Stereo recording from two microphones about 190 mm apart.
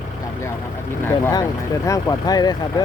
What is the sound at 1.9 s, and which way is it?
Speech, 20° left (ahead or behind).